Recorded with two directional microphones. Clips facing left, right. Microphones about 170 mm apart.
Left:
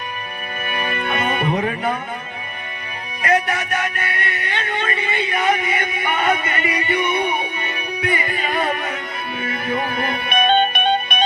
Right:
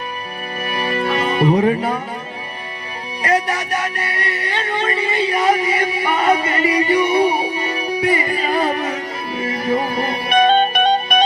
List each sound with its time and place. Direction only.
0.6 s music: 35° right (ahead or behind)
3.2 s music: 35° right (ahead or behind)